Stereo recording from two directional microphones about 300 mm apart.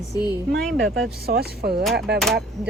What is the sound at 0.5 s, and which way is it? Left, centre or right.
Speech, centre.